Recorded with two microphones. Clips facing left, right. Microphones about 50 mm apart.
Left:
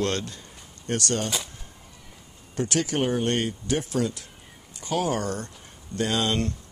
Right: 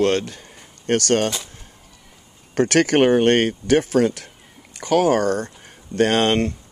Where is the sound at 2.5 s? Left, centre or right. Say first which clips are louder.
Right 10 dB; right.